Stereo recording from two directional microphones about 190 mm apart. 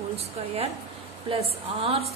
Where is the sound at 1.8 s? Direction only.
30° right (ahead or behind).